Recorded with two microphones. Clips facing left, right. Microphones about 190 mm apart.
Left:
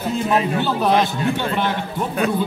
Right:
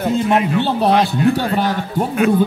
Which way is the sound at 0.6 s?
30° right (ahead or behind).